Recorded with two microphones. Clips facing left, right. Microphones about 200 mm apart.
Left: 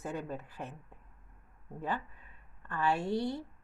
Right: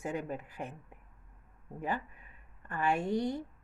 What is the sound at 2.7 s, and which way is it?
Speech, 15° right (ahead or behind).